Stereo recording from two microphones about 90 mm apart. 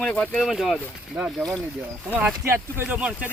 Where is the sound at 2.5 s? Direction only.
25° right (ahead or behind).